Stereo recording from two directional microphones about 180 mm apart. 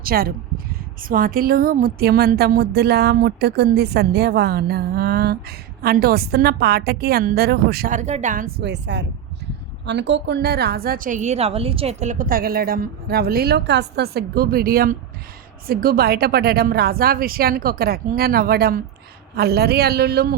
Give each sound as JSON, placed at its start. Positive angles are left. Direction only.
{"t": 0.0, "sound": "a woman's voice", "side_deg": -55}
{"t": 8.6, "sound": "a woman's voice", "side_deg": -75}